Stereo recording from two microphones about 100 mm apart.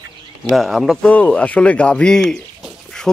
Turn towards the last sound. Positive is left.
turn(degrees=5)  # may be behind; listen again after turning